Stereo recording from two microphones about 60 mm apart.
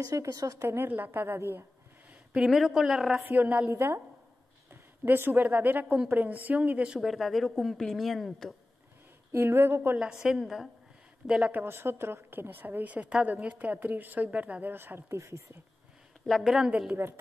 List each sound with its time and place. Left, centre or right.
0.0 s a woman's voice: right
0.6 s speech: right
0.8 s speech: right
2.4 s a woman's voice: centre
3.3 s a woman's voice: right
3.6 s speech: right
5.0 s a woman's voice: right
6.9 s speech: centre
9.3 s speech: right
10.2 s a woman's voice: centre
11.5 s a woman's voice: right
14.7 s speech: right
16.3 s speech: centre